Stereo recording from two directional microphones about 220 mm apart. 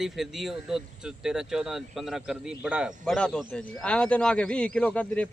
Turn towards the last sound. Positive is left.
turn(degrees=5)  # may be behind; listen again after turning